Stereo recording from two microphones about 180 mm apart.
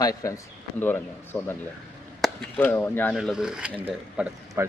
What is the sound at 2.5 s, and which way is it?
Speech, 10° left (ahead or behind).